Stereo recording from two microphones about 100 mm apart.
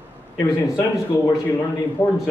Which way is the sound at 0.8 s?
25° left (ahead or behind).